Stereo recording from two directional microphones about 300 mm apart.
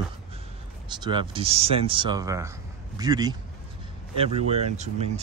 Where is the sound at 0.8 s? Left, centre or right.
Centre.